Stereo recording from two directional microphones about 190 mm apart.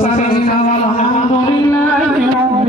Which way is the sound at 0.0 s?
40° left (ahead or behind).